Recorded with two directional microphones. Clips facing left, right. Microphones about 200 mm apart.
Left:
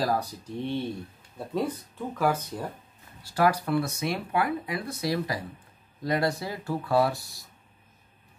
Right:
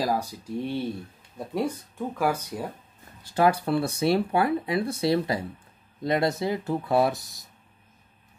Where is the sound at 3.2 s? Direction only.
20° right (ahead or behind).